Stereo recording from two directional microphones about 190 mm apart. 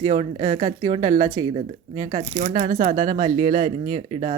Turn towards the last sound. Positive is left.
turn(degrees=-35)  # may be behind; listen again after turning